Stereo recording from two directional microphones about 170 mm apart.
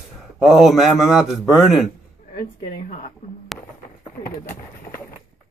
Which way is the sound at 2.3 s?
50° left (ahead or behind).